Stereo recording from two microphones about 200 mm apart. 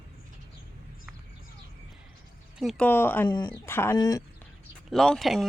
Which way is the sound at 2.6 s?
Centre (ahead or behind).